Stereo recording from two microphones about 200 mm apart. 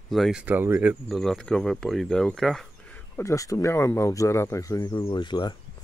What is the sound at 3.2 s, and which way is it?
Speech, 15° left (ahead or behind).